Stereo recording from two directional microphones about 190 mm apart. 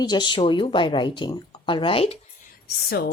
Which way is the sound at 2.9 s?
55° left (ahead or behind).